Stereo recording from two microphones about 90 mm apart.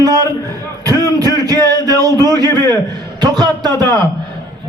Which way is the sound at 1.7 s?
45° left (ahead or behind).